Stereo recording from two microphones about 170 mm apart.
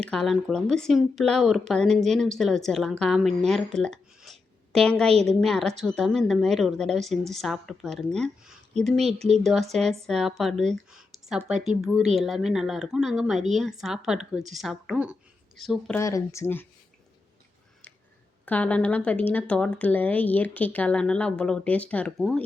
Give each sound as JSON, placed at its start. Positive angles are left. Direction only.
{"t": 0.0, "sound": "speech", "side_deg": 5}
{"t": 16.0, "sound": "speech", "side_deg": 15}
{"t": 18.4, "sound": "speech", "side_deg": 10}